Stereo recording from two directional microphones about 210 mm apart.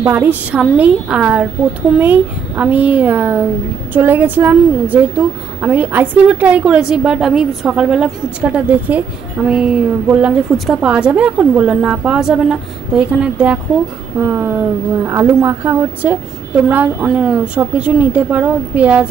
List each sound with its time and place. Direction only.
0.0 s a woman's voice: 10° right (ahead or behind)